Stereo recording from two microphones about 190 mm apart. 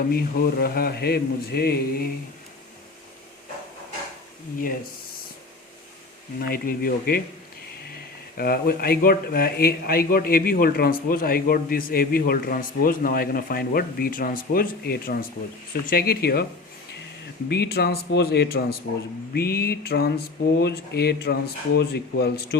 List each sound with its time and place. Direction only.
0.6 s speech: 55° left (ahead or behind)
6.4 s speech: 50° left (ahead or behind)
8.4 s speech: 50° left (ahead or behind)
17.5 s speech: 55° left (ahead or behind)